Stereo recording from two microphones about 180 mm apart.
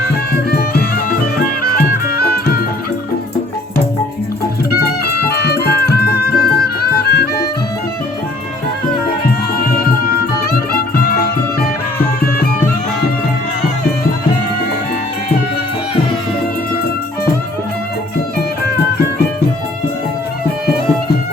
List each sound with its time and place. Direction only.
0.5 s music: 60° left (ahead or behind)
4.7 s music: 60° left (ahead or behind)
9.8 s music: 55° left (ahead or behind)